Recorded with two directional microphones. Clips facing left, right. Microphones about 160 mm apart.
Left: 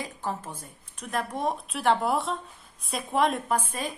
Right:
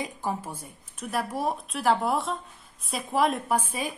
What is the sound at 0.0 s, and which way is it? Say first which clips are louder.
A woman's voice: right 2 dB; 10° right (ahead or behind).